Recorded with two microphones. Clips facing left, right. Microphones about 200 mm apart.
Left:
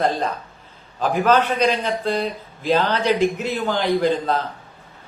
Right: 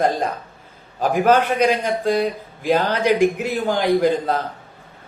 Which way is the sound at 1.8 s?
10° right (ahead or behind).